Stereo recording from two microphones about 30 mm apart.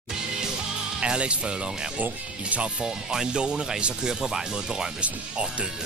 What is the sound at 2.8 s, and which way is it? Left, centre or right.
Speech, centre.